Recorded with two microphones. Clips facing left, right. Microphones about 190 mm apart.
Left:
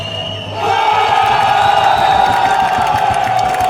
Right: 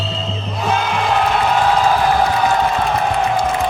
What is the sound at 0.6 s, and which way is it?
Crowd, 70° left (ahead or behind).